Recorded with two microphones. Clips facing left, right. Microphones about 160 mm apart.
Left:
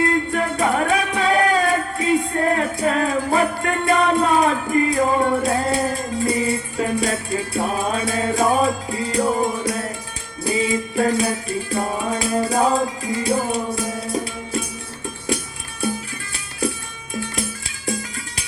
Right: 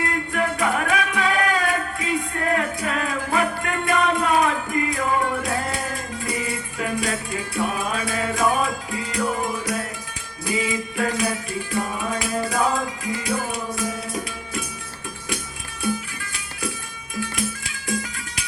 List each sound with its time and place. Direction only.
0.0 s music: 30° left (ahead or behind)